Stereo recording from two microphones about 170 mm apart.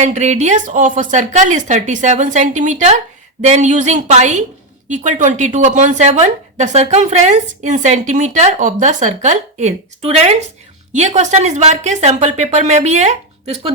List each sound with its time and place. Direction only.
0.0 s a woman's voice: 40° right (ahead or behind)